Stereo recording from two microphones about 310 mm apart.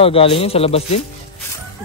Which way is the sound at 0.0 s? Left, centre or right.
Centre.